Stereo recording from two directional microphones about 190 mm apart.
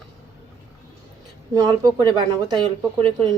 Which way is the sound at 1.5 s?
20° right (ahead or behind).